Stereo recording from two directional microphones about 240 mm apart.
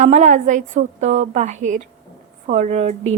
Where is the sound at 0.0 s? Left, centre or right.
Right.